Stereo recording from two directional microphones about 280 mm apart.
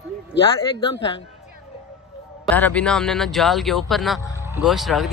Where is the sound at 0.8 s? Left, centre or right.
Centre.